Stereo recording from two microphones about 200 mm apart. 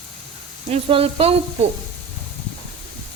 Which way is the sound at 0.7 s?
30° right (ahead or behind).